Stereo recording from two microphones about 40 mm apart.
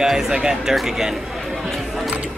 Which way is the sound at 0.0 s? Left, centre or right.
Centre.